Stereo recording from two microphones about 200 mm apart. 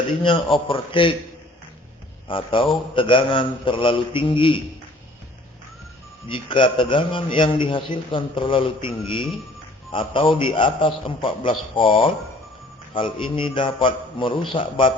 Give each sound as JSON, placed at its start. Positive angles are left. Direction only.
{"t": 0.2, "sound": "a man's voice", "side_deg": 25}
{"t": 2.2, "sound": "a man's voice", "side_deg": 25}
{"t": 6.2, "sound": "a man's voice", "side_deg": 25}